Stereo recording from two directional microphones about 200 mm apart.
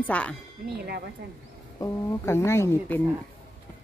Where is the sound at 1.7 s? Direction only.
15° left (ahead or behind).